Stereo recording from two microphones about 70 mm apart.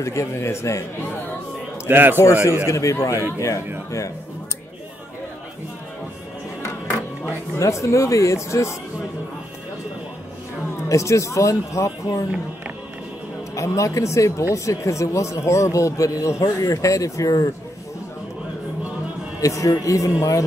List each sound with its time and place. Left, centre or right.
0.0 s speech: left
1.9 s a man's voice: right
2.1 s a man's voice: left
7.2 s speech: left
10.9 s speech: left
13.6 s speech: left
19.4 s speech: left